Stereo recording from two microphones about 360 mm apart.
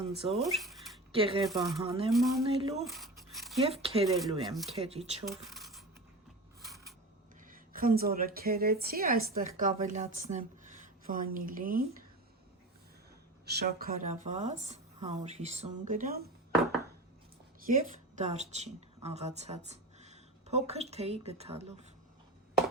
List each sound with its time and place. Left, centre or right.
0.0 s speech: centre
0.3 s speech: centre
1.1 s speech: centre
1.5 s speech: centre
2.5 s speech: centre
2.8 s a sound: centre
3.6 s speech: centre
4.8 s speech: centre
5.2 s a sound: centre
7.7 s a woman's voice: right
13.4 s a woman's voice: right
17.7 s a woman's voice: right